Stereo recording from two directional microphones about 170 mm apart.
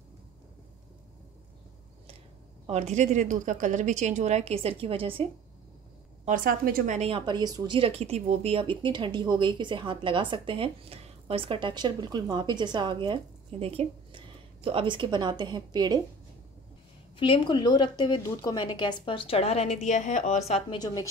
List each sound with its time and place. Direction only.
2.6 s a woman's voice: 40° right (ahead or behind)
6.2 s a woman's voice: 55° right (ahead or behind)
7.0 s speech: 30° right (ahead or behind)
17.2 s a woman's voice: 30° left (ahead or behind)
20.8 s a woman's voice: 20° left (ahead or behind)